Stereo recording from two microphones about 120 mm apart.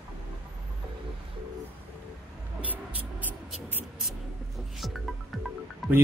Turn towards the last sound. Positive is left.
turn(degrees=0)  # may be behind; listen again after turning